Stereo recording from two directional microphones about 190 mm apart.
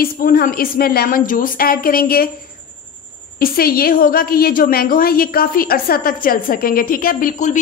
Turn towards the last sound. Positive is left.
turn(degrees=45)  # may be behind; listen again after turning